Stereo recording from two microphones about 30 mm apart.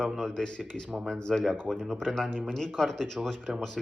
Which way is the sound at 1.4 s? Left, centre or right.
Centre.